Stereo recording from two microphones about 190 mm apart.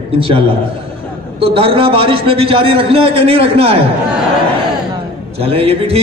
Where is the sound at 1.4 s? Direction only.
30° right (ahead or behind).